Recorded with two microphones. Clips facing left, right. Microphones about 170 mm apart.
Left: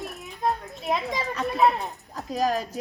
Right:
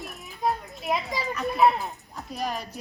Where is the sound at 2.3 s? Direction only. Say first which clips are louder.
Left 7 dB; 90° left.